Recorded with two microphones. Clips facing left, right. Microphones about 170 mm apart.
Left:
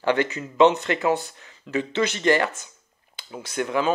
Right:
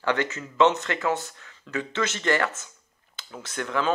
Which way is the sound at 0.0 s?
20° left (ahead or behind).